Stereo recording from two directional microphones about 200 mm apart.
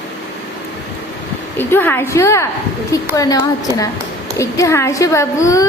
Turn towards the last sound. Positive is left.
turn(degrees=15)  # may be behind; listen again after turning